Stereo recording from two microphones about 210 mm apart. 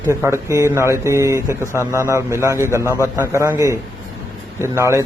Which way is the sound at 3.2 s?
10° right (ahead or behind).